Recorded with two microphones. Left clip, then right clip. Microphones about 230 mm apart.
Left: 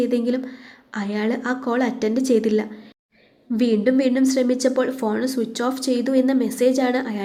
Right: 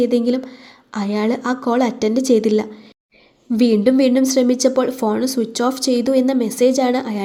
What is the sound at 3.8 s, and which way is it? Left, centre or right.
Speech, right.